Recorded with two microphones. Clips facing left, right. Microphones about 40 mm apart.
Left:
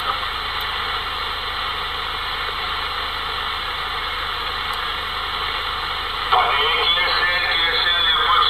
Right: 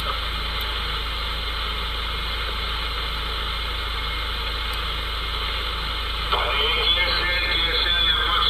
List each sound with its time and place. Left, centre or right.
6.3 s radio: centre